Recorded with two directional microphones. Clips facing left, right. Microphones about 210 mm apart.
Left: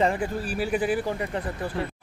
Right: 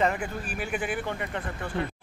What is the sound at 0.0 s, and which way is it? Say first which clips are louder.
Speech: left 3 dB; 30° left (ahead or behind).